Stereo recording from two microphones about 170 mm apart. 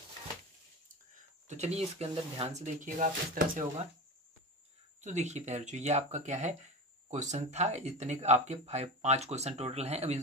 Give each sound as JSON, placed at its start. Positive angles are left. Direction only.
{"t": 1.5, "sound": "speech", "side_deg": -40}
{"t": 5.0, "sound": "speech", "side_deg": -40}